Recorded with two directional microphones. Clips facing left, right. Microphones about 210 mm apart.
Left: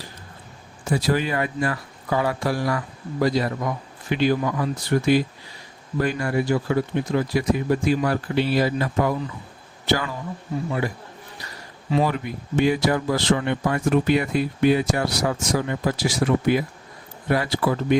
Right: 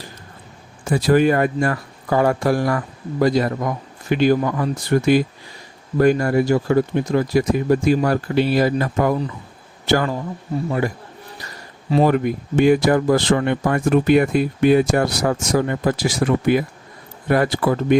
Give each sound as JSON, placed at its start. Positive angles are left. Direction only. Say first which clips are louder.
{"t": 0.9, "sound": "speech", "louder": "right 7 dB", "side_deg": -50}
{"t": 12.1, "sound": "speech", "louder": "right 7 dB", "side_deg": -55}